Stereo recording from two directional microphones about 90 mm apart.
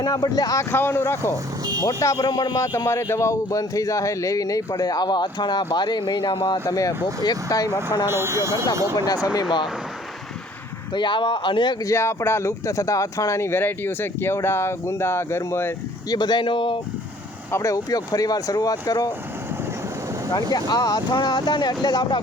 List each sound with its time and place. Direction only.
0.0 s speech: 50° left (ahead or behind)
0.7 s speech: 25° left (ahead or behind)
1.8 s speech: 40° left (ahead or behind)
2.7 s speech: 30° left (ahead or behind); by 6.3 s 55° left (ahead or behind)
6.5 s speech: 40° left (ahead or behind)
8.0 s speech: 30° right (ahead or behind)
9.2 s speech: 45° left (ahead or behind)
10.9 s speech: 60° left (ahead or behind)
11.8 s speech: 35° left (ahead or behind)
16.0 s speech: 50° left (ahead or behind)
17.5 s speech: 35° left (ahead or behind)
20.3 s speech: 45° left (ahead or behind)